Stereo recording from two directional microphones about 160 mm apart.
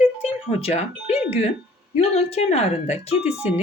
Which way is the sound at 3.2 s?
10° right (ahead or behind).